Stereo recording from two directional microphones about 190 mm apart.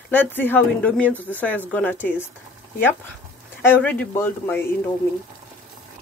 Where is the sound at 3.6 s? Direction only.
10° left (ahead or behind).